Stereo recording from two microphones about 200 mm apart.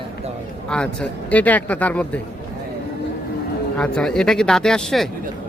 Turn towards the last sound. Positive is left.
turn(degrees=0)  # may be behind; listen again after turning